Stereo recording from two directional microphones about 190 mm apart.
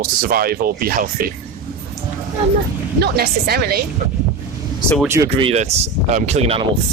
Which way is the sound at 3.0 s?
55° right (ahead or behind).